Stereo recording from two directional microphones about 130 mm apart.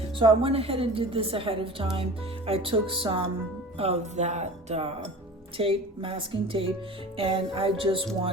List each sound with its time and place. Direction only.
0.2 s a woman's voice: 45° right (ahead or behind)
3.8 s music: 55° right (ahead or behind)
5.5 s a woman's voice: 45° right (ahead or behind)